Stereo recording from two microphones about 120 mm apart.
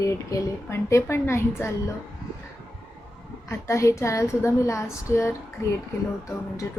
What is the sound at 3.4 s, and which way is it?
Speech, 25° left (ahead or behind).